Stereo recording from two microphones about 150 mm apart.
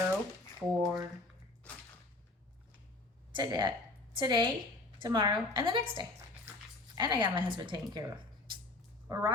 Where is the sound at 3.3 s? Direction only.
30° right (ahead or behind).